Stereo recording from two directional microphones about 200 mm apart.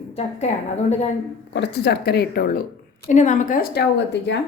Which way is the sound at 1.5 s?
60° left (ahead or behind).